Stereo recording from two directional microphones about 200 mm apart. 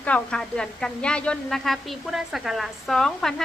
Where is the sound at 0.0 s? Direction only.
5° left (ahead or behind).